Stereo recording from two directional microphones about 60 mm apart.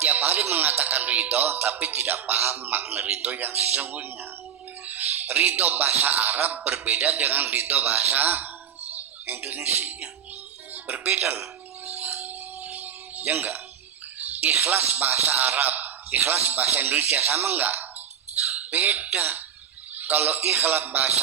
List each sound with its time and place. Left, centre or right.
0.0 s speech: right
4.9 s bird: right
5.5 s a man's voice: right
11.9 s music: right
14.2 s speech: right